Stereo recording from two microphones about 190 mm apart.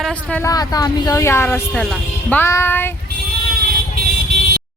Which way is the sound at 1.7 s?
Centre (ahead or behind).